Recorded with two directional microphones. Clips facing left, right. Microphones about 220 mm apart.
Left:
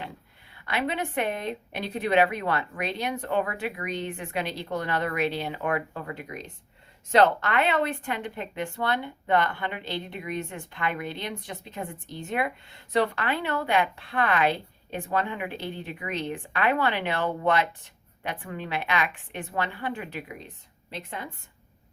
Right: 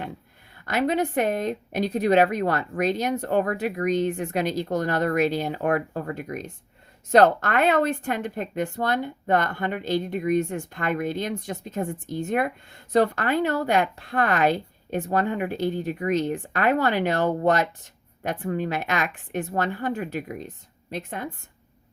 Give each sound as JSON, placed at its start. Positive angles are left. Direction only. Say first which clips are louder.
{"t": 0.6, "sound": "a woman's voice", "louder": "right 6 dB", "side_deg": -45}